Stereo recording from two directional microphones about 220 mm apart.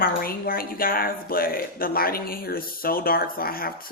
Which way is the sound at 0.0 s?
40° left (ahead or behind).